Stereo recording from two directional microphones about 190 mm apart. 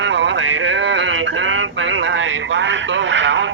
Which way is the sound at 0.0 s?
75° right (ahead or behind).